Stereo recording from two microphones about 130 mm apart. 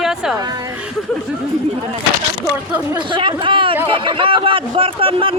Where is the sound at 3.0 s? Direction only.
40° right (ahead or behind).